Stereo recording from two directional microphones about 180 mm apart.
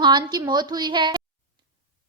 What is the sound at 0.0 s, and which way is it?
A woman's voice, 25° right (ahead or behind).